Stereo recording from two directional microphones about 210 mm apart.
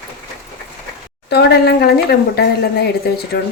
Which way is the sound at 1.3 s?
50° left (ahead or behind).